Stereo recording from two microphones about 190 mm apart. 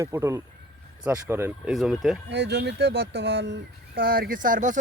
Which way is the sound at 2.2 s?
65° right (ahead or behind).